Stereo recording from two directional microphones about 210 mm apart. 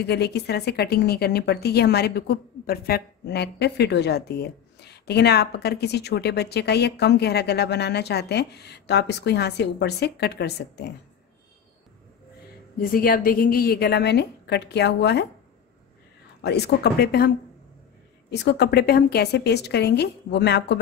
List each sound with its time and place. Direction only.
0.0 s a woman's voice: 50° left (ahead or behind)
12.8 s a woman's voice: 45° left (ahead or behind)
16.3 s a woman's voice: 50° left (ahead or behind)
18.3 s a woman's voice: 55° left (ahead or behind)